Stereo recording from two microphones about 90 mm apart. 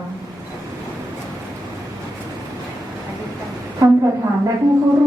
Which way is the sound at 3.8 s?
40° right (ahead or behind).